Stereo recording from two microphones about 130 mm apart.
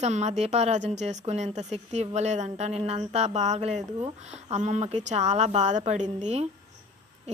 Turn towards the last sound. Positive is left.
turn(degrees=-60)  # may be behind; listen again after turning